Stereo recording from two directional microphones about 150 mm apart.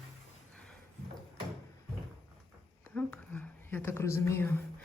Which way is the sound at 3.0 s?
10° left (ahead or behind).